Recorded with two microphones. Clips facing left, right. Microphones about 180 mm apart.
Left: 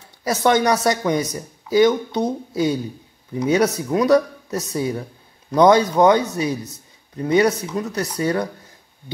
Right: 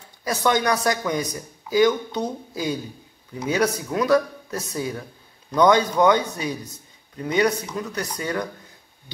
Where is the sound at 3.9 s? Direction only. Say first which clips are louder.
Left 5 dB; 25° left (ahead or behind).